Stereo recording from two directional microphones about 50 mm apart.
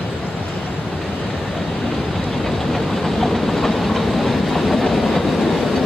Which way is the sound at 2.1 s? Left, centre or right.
Centre.